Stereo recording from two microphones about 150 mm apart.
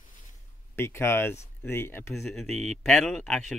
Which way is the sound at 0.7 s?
15° left (ahead or behind).